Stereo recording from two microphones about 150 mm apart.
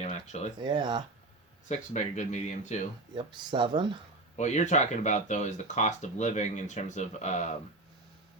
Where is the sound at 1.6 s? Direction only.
50° left (ahead or behind).